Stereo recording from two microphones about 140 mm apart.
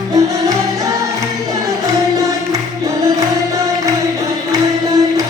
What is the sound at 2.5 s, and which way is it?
Music, 25° right (ahead or behind).